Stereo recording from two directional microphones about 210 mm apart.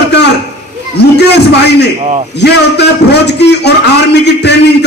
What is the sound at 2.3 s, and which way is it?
A man's voice, 55° left (ahead or behind).